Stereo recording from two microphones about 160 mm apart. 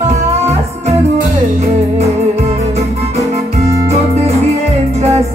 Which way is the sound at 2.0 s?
40° right (ahead or behind).